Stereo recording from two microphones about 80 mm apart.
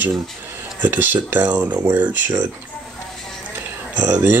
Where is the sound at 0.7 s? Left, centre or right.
Right.